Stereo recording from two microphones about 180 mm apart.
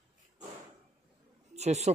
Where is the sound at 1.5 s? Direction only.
40° right (ahead or behind).